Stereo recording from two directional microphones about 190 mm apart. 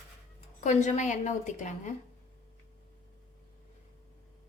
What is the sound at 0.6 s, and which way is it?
A woman's voice, 40° left (ahead or behind).